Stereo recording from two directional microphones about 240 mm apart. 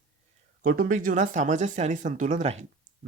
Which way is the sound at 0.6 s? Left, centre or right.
Right.